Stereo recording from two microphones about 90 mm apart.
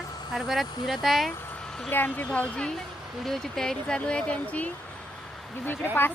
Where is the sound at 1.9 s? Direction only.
20° left (ahead or behind).